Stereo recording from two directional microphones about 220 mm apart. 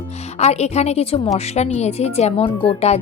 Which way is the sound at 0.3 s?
30° left (ahead or behind).